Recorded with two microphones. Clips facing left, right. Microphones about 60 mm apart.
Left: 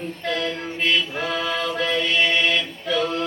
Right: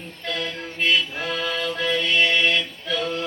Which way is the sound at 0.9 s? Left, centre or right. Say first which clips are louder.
Left 1 dB; centre.